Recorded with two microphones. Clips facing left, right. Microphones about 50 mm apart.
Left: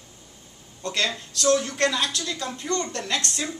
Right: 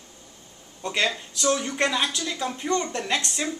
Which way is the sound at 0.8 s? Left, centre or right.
Centre.